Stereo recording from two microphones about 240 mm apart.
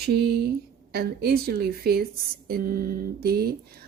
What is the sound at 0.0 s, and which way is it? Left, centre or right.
A woman's voice, right.